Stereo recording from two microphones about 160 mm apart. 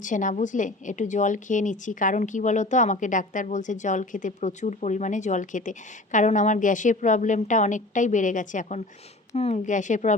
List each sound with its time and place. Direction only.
0.0 s a woman's voice: 55° left (ahead or behind)
9.3 s a woman's voice: 40° left (ahead or behind)